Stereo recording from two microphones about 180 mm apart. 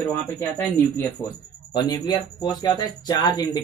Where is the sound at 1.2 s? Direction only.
20° left (ahead or behind).